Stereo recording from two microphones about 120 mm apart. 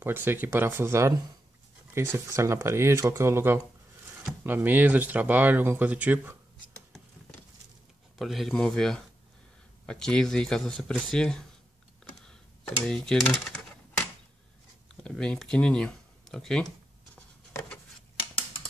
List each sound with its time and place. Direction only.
0.0 s speech: 20° right (ahead or behind)
8.2 s speech: centre (ahead or behind)
12.8 s speech: 5° left (ahead or behind)
15.0 s speech: 5° left (ahead or behind)